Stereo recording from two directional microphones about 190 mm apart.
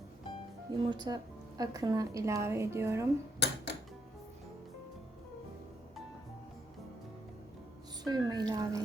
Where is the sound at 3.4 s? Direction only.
65° left (ahead or behind).